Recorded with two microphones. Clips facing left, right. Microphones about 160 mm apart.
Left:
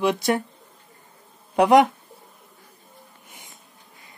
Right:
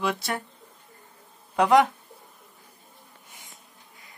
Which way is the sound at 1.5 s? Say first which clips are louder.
Left 4 dB; 15° left (ahead or behind).